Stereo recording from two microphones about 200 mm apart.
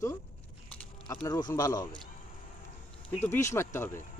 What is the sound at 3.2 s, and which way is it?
Speech, 10° left (ahead or behind).